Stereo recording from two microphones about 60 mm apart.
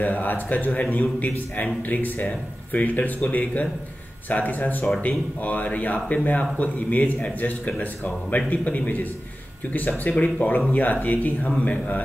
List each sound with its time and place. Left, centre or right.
0.0 s speech: left